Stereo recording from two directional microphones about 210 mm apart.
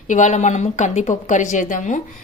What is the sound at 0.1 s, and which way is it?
A woman's voice, 35° left (ahead or behind).